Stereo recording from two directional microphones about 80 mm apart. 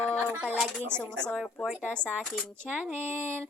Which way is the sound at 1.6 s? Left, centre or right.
Centre.